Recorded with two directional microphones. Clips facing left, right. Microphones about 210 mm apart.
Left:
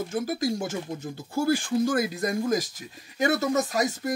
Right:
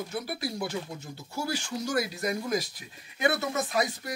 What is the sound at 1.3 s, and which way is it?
Speech, 50° left (ahead or behind).